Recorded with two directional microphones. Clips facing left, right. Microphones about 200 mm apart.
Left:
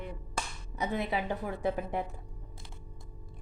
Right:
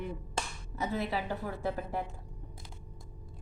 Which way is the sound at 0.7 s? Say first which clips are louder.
Left 1 dB; 15° left (ahead or behind).